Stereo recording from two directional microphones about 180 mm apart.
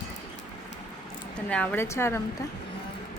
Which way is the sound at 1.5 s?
5° left (ahead or behind).